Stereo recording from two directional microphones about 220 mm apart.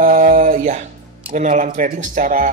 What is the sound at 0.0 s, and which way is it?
Speech, 35° right (ahead or behind).